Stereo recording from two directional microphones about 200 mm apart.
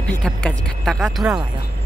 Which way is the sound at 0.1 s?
5° left (ahead or behind).